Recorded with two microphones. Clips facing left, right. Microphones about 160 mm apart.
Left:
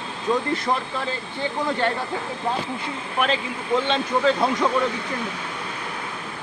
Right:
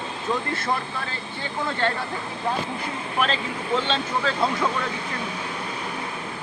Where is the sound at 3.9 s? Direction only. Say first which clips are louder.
Left 5 dB; 15° left (ahead or behind).